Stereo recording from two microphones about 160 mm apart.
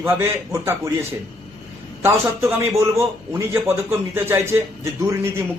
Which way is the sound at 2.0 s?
15° right (ahead or behind).